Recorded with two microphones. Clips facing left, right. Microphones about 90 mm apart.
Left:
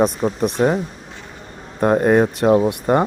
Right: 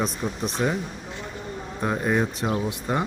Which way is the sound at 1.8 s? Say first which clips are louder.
Left 10 dB; 55° left (ahead or behind).